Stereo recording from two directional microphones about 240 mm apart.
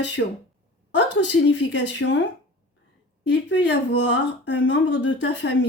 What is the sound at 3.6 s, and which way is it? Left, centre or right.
Speech, left.